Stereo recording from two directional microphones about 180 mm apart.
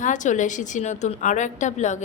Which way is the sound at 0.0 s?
45° left (ahead or behind).